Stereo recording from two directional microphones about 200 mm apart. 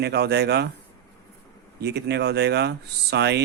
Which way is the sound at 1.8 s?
55° right (ahead or behind).